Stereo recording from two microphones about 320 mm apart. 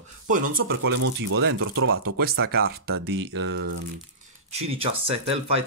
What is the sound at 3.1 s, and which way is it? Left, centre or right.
Speech, right.